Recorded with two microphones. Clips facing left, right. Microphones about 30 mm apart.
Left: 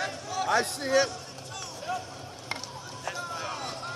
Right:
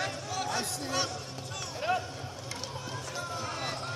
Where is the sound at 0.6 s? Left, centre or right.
Left.